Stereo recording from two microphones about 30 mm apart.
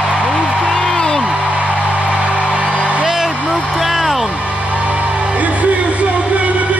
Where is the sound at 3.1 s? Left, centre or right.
Centre.